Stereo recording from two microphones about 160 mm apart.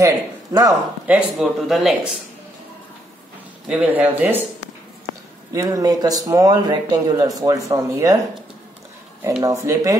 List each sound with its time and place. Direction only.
0.0 s speech: 20° right (ahead or behind)
1.0 s speech: 5° right (ahead or behind)
3.6 s speech: 10° right (ahead or behind)
5.5 s speech: 20° right (ahead or behind)
9.4 s speech: 20° right (ahead or behind)